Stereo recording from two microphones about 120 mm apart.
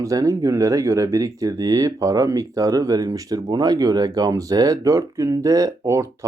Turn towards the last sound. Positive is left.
turn(degrees=-25)  # may be behind; listen again after turning